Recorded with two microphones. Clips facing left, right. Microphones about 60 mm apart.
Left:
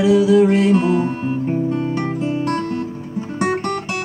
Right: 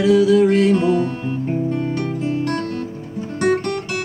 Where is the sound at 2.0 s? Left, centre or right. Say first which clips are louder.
Left 1 dB; left.